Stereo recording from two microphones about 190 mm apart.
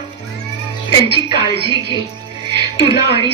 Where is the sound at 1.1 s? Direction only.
25° right (ahead or behind).